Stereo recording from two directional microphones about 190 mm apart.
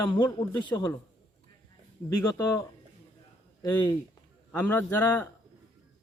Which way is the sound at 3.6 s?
20° left (ahead or behind).